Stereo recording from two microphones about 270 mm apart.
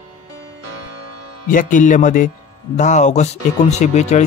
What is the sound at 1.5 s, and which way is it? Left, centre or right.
A man's voice, left.